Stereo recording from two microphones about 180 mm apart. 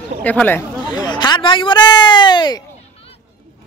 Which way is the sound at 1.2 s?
25° left (ahead or behind).